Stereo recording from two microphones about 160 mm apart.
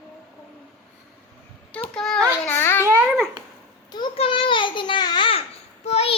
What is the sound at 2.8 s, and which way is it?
Babbling, 15° right (ahead or behind).